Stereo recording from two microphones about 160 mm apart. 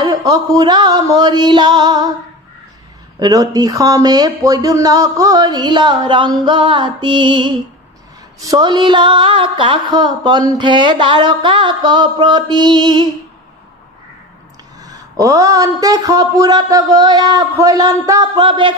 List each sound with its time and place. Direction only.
0.0 s a woman's voice: 25° right (ahead or behind)
3.2 s a woman's voice: 25° right (ahead or behind)
14.8 s a woman's voice: 20° right (ahead or behind)